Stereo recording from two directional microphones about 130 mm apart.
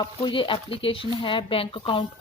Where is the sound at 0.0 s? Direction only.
40° left (ahead or behind).